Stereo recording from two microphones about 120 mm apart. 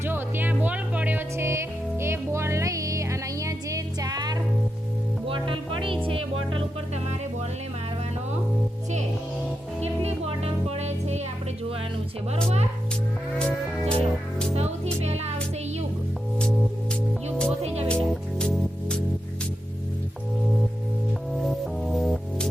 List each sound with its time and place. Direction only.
0.0 s speech: 15° right (ahead or behind); by 4.4 s 35° right (ahead or behind)
5.3 s music: 45° right (ahead or behind)
9.8 s music: 55° right (ahead or behind)
13.4 s music: 10° left (ahead or behind)
15.0 s music: 65° right (ahead or behind)
16.4 s music: 10° left (ahead or behind)
21.4 s music: centre (ahead or behind)